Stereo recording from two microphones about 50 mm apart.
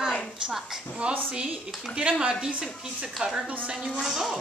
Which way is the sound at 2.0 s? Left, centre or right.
Centre.